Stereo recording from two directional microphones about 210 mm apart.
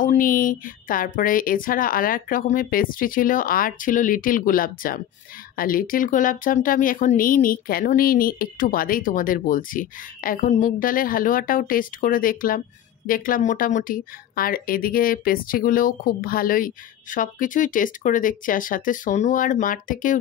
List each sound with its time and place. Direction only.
0.0 s speech: 40° left (ahead or behind)